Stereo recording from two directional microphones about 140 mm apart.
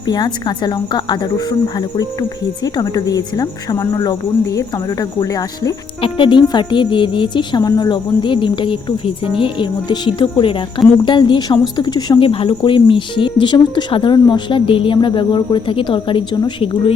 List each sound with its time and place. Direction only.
0.0 s a woman's voice: 30° left (ahead or behind)
6.0 s a woman's voice: 35° left (ahead or behind)